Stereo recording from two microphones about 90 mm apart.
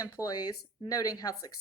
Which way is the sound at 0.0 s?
45° left (ahead or behind).